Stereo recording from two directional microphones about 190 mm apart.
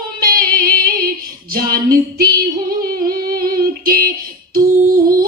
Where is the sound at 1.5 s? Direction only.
50° right (ahead or behind).